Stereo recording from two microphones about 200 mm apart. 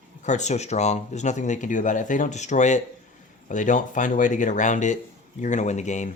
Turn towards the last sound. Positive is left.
turn(degrees=35)  # may be behind; listen again after turning